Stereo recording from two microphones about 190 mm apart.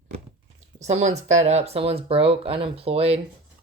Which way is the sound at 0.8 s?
35° right (ahead or behind).